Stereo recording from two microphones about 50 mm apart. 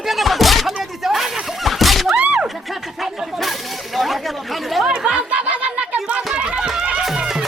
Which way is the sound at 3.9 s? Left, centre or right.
Centre.